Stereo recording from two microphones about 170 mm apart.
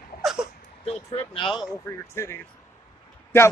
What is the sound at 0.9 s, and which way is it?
Speech, 35° left (ahead or behind).